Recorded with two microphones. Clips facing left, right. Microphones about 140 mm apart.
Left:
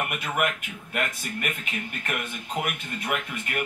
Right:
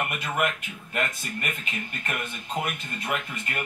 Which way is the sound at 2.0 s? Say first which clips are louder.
Even; 5° left (ahead or behind).